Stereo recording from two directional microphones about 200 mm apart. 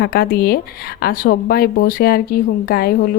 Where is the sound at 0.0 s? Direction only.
50° left (ahead or behind).